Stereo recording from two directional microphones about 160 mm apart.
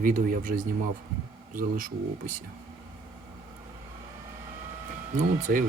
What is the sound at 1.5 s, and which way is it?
Speech, 60° right (ahead or behind).